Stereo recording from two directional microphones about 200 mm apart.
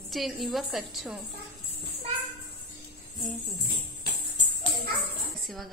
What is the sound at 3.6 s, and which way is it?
Music, 50° left (ahead or behind).